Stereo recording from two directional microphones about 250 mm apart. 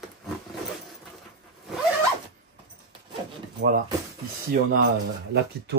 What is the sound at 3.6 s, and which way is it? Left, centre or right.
Speech, right.